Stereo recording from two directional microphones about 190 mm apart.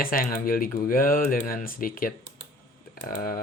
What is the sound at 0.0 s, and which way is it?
Speech, 50° left (ahead or behind).